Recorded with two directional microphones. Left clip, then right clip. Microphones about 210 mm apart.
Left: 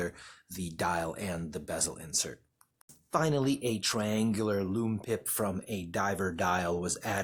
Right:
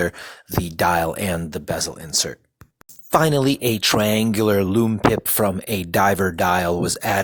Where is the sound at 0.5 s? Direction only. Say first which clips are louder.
Right 13 dB; 30° right (ahead or behind).